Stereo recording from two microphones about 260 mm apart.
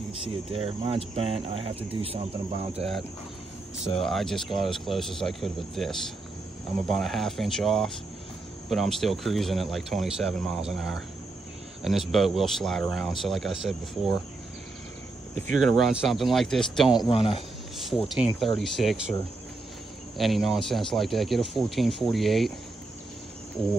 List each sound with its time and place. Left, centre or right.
0.5 s speech: right
4.0 s speech: centre
15.6 s speech: centre
16.9 s speech: centre
18.0 s speech: centre
20.2 s speech: centre